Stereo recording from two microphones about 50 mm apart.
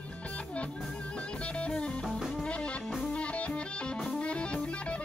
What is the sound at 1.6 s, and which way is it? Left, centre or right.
Music, left.